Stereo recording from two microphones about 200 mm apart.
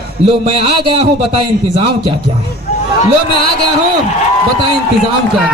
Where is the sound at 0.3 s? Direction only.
25° right (ahead or behind).